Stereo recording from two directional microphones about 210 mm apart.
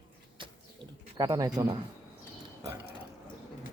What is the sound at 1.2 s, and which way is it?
Speech, 15° right (ahead or behind).